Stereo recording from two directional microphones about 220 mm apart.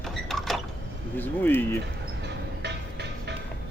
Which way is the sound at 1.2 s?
10° left (ahead or behind).